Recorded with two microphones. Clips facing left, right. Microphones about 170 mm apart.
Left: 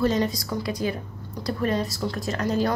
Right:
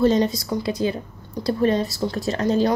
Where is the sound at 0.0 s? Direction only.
25° right (ahead or behind).